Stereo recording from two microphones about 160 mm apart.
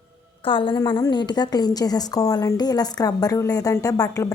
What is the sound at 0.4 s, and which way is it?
A woman's voice, 30° left (ahead or behind).